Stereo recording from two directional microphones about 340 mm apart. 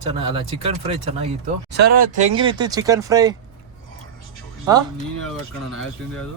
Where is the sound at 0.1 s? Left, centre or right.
Centre.